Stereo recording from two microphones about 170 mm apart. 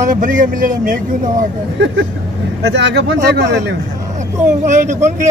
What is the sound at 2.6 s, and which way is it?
Speech, 90° right.